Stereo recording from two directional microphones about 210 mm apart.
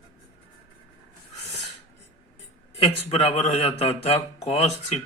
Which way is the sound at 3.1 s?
30° left (ahead or behind).